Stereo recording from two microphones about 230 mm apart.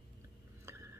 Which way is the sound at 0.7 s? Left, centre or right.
Centre.